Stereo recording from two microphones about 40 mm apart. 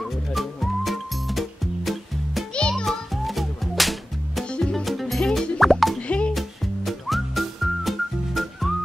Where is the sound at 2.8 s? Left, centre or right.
Centre.